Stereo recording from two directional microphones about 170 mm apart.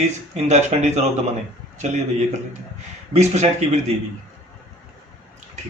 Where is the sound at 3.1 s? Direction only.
40° right (ahead or behind).